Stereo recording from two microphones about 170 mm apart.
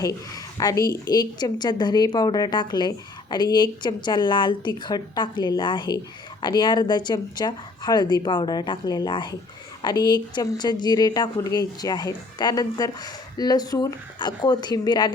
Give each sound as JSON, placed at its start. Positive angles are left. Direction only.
{"t": 0.6, "sound": "a woman's voice", "side_deg": 20}